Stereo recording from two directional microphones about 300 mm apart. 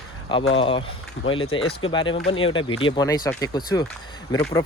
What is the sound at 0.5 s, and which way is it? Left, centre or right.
Speech, centre.